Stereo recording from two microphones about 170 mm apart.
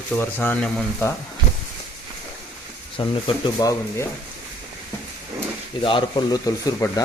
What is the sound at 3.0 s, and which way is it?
Speech, 25° left (ahead or behind).